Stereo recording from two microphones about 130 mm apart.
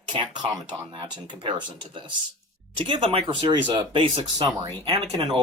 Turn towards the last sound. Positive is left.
turn(degrees=-40)  # may be behind; listen again after turning